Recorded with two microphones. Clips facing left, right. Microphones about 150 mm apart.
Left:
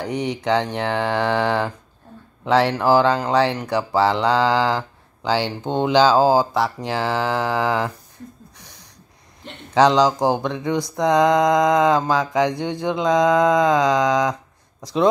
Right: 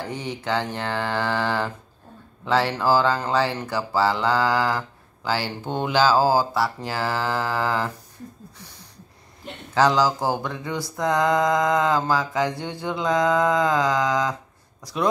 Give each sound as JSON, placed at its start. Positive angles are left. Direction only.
{"t": 0.0, "sound": "speech", "side_deg": 15}
{"t": 9.8, "sound": "speech", "side_deg": 20}